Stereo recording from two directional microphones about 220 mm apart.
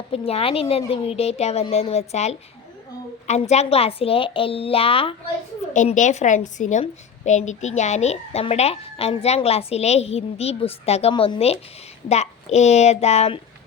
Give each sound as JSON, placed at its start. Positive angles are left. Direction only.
{"t": 0.1, "sound": "a woman's voice", "side_deg": 25}